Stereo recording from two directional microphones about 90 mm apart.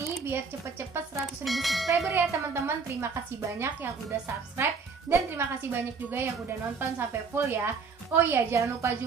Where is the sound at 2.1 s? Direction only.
25° right (ahead or behind).